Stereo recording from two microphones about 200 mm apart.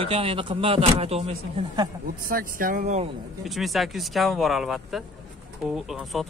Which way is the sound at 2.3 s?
45° right (ahead or behind).